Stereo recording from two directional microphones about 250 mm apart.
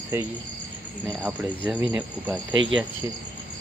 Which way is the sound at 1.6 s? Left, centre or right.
Centre.